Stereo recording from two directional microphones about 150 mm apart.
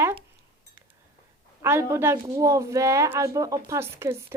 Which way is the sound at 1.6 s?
15° right (ahead or behind).